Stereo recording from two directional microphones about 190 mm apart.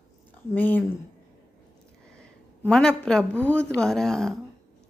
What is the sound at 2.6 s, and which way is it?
A woman's voice, 5° left (ahead or behind).